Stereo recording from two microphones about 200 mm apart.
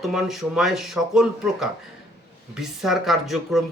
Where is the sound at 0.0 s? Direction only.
Centre (ahead or behind).